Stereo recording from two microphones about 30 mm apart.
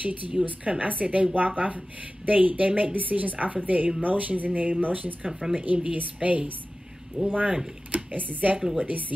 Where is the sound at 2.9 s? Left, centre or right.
Right.